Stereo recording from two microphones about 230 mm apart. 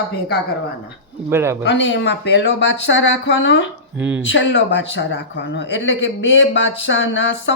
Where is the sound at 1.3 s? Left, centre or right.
Centre.